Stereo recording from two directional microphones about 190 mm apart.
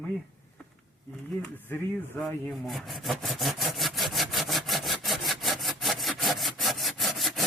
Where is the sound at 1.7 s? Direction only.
10° left (ahead or behind).